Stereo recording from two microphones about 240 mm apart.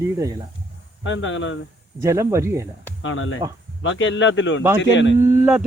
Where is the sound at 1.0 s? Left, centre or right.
Left.